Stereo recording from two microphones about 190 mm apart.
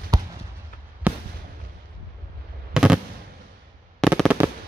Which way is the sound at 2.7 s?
5° right (ahead or behind).